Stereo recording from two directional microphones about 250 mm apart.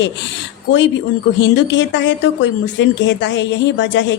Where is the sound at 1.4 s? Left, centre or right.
Left.